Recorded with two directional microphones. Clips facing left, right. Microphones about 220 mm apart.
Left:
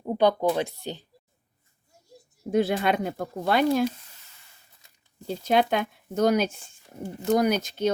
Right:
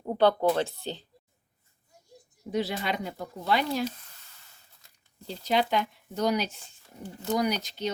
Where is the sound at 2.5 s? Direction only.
50° left (ahead or behind).